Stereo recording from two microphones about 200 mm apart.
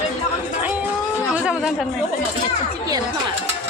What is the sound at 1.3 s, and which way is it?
Speech, 5° right (ahead or behind).